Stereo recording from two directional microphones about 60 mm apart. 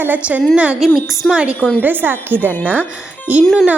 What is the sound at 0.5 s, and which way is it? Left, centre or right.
Speech, centre.